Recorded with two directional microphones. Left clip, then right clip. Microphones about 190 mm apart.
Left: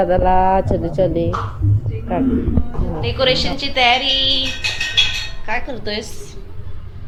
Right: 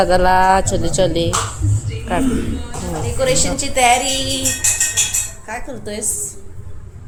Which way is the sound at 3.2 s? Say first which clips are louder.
Left 1 dB; 5° right (ahead or behind).